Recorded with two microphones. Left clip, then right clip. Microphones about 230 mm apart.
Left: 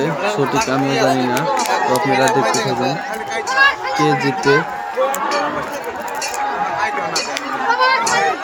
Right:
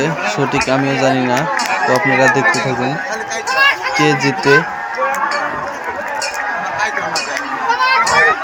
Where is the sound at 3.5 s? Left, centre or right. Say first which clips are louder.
Right 1 dB; right.